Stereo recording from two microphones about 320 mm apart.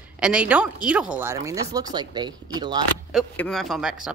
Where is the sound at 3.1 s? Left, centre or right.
Centre.